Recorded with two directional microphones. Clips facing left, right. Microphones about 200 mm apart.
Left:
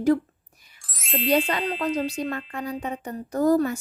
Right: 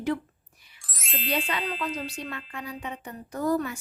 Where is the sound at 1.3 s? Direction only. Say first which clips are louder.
Left 7 dB; 40° left (ahead or behind).